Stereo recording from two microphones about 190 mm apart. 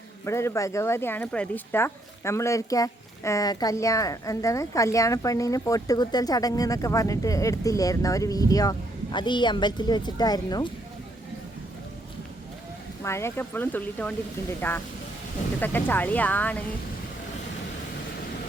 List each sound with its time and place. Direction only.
0.3 s speech: 15° left (ahead or behind)
13.0 s speech: 15° left (ahead or behind)